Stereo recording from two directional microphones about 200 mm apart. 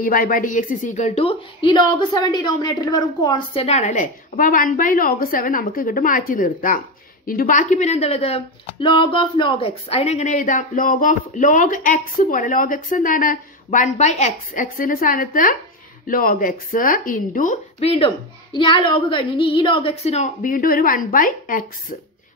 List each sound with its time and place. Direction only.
0.0 s a woman's voice: 45° left (ahead or behind)